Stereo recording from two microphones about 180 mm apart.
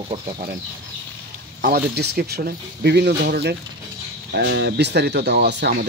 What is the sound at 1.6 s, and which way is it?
Speech, 60° right (ahead or behind).